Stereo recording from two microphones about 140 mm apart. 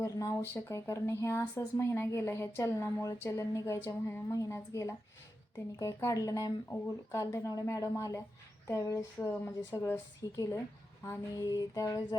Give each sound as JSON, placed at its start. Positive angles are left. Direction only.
{"t": 0.0, "sound": "speech", "side_deg": 20}